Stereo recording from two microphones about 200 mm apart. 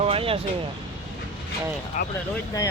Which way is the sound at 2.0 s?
40° left (ahead or behind).